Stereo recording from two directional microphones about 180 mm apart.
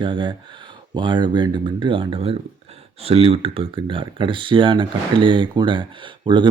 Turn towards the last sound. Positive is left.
turn(degrees=-25)  # may be behind; listen again after turning